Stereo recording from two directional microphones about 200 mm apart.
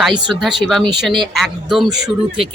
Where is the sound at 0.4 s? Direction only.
Centre (ahead or behind).